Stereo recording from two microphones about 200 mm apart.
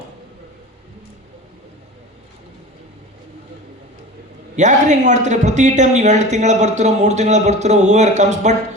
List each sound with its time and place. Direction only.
4.5 s speech: 35° right (ahead or behind)